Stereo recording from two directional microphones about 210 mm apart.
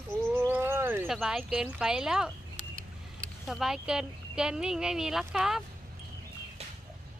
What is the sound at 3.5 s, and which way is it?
Speech, centre (ahead or behind).